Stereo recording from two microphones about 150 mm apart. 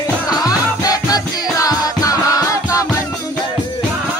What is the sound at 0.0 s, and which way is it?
Music, 25° left (ahead or behind).